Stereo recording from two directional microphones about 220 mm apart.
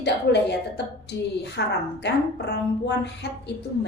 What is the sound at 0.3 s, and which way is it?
A woman's voice, 50° left (ahead or behind).